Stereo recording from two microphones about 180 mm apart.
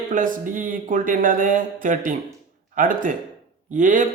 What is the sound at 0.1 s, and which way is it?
A man's voice, 45° right (ahead or behind).